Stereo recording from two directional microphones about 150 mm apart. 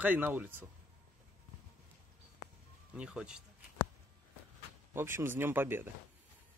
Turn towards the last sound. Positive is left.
turn(degrees=-15)  # may be behind; listen again after turning